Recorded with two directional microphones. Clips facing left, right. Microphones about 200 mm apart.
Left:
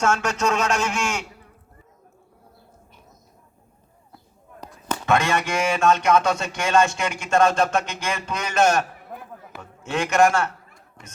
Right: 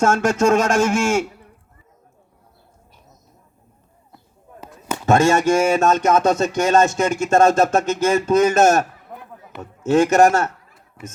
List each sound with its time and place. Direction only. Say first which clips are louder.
0.0 s speech: right 6 dB; 45° right (ahead or behind)
4.6 s a sound: right 2 dB; 5° right (ahead or behind)
5.0 s a man's voice: right 7 dB; 45° right (ahead or behind)
11.0 s speech: right 11 dB; 5° right (ahead or behind)